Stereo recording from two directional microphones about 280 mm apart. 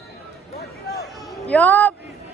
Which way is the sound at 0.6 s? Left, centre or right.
Left.